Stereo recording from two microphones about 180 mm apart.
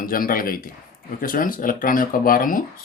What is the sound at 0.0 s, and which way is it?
Speech, 50° left (ahead or behind).